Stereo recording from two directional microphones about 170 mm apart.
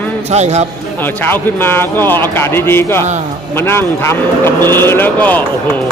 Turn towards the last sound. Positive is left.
turn(degrees=10)  # may be behind; listen again after turning